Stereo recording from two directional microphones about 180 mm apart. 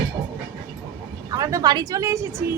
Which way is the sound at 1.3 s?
20° right (ahead or behind).